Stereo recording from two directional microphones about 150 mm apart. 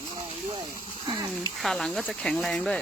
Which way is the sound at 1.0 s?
25° right (ahead or behind).